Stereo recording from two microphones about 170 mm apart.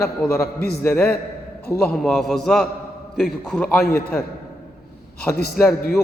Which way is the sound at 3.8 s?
65° left (ahead or behind).